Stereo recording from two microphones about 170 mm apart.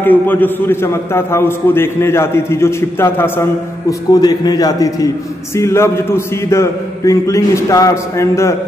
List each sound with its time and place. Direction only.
0.0 s a man's voice: 10° left (ahead or behind)